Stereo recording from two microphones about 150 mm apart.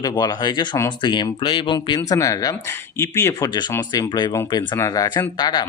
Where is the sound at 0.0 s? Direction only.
25° left (ahead or behind).